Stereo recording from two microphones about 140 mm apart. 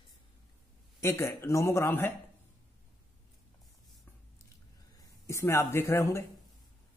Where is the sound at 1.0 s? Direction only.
20° left (ahead or behind).